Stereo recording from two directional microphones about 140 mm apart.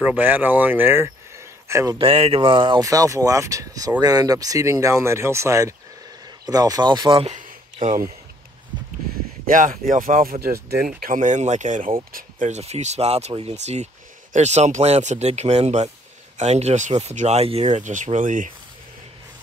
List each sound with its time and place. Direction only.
0.0 s speech: 10° right (ahead or behind)
2.0 s speech: 40° right (ahead or behind)
2.8 s speech: 25° right (ahead or behind)
7.2 s a sound: 60° right (ahead or behind)
9.5 s speech: 70° right (ahead or behind)
10.4 s speech: 90° right; by 11.9 s 60° right (ahead or behind)
12.1 s speech: 80° right